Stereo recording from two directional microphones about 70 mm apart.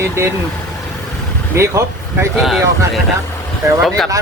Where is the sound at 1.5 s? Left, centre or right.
Right.